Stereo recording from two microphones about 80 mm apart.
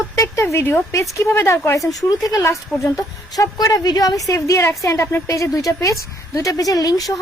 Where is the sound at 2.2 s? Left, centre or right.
Left.